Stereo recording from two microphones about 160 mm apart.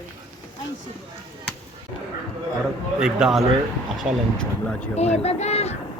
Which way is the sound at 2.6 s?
5° right (ahead or behind).